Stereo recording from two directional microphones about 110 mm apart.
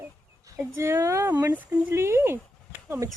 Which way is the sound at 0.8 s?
25° right (ahead or behind).